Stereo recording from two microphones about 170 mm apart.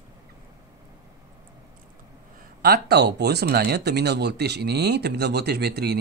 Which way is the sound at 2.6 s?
70° right (ahead or behind).